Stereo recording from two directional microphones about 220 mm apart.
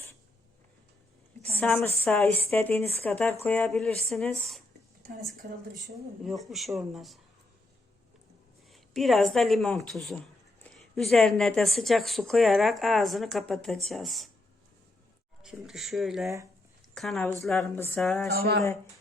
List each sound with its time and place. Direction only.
1.5 s a woman's voice: 10° left (ahead or behind)
5.4 s a woman's voice: 40° right (ahead or behind)
6.2 s speech: centre (ahead or behind)
8.7 s speech: centre (ahead or behind)
15.4 s speech: centre (ahead or behind)
18.3 s speech: 45° right (ahead or behind)